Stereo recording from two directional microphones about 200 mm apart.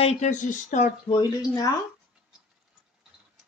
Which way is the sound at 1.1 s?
20° left (ahead or behind).